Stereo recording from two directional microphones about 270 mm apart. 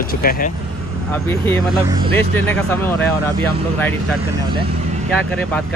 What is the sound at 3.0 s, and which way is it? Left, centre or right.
Speech, centre.